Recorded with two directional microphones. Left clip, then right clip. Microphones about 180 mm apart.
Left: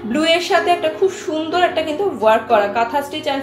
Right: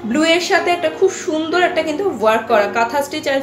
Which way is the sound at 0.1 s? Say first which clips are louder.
Right 1 dB; 25° right (ahead or behind).